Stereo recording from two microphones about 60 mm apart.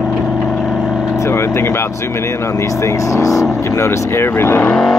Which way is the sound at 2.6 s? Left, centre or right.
Left.